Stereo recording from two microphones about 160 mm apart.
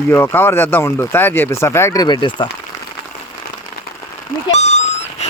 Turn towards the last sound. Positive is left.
turn(degrees=45)  # may be behind; listen again after turning